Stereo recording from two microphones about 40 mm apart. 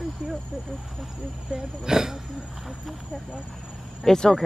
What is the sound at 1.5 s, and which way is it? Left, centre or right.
Speech, centre.